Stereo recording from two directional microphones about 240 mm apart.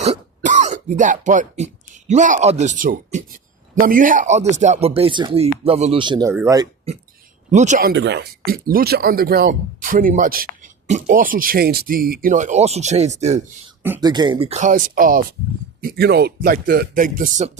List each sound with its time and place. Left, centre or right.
0.0 s speech: right; by 6.7 s centre
7.5 s speech: right
13.8 s speech: centre; by 17.5 s right